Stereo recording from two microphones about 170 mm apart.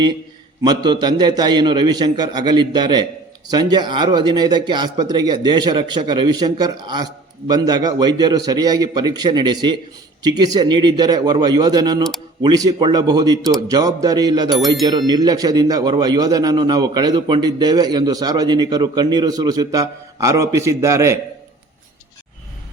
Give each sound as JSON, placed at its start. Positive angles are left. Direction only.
{"t": 0.6, "sound": "speech", "side_deg": -25}